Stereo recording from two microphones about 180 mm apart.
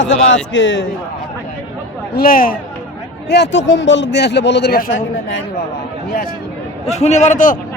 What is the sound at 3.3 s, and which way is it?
A man's voice, 75° left (ahead or behind).